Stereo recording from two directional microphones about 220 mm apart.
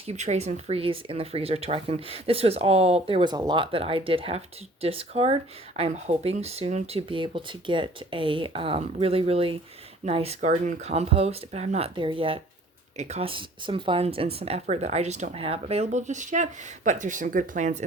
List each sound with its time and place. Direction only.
0.0 s speech: 30° right (ahead or behind)